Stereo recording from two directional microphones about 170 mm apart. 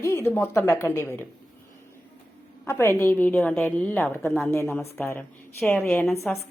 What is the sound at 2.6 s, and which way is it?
A woman's voice, 15° left (ahead or behind).